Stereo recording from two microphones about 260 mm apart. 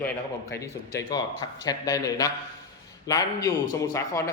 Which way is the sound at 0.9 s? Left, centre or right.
Centre.